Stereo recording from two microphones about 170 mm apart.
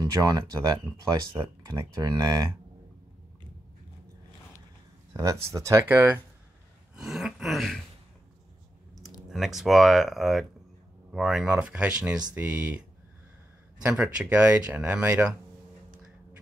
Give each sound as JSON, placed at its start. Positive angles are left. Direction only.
{"t": 0.0, "sound": "speech", "side_deg": -20}
{"t": 5.1, "sound": "speech", "side_deg": -20}
{"t": 7.0, "sound": "speech", "side_deg": 0}
{"t": 9.3, "sound": "speech", "side_deg": 0}
{"t": 13.8, "sound": "speech", "side_deg": -5}